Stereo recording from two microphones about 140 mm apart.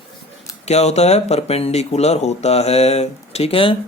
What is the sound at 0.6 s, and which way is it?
Speech, 50° left (ahead or behind).